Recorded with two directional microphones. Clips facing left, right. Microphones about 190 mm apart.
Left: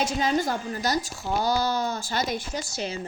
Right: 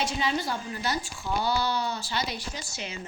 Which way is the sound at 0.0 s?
45° left (ahead or behind).